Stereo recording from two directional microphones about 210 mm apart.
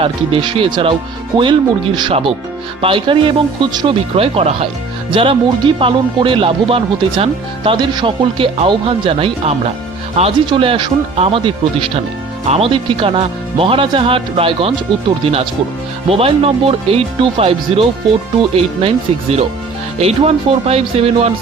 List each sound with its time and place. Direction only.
0.0 s speech: 25° right (ahead or behind)